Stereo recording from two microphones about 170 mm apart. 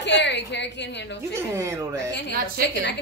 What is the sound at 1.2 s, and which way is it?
Speech, 15° right (ahead or behind).